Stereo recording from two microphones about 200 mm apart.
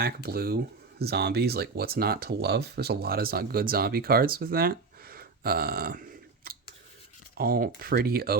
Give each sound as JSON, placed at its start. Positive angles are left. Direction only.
{"t": 0.0, "sound": "speech", "side_deg": -50}
{"t": 7.3, "sound": "speech", "side_deg": -45}